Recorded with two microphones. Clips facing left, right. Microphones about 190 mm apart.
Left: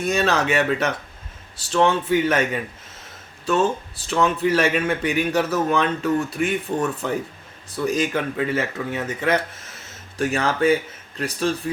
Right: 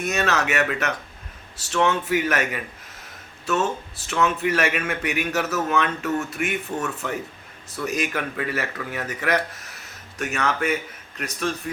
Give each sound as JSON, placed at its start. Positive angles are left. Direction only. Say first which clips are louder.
{"t": 0.0, "sound": "speech", "louder": "left 3 dB", "side_deg": 30}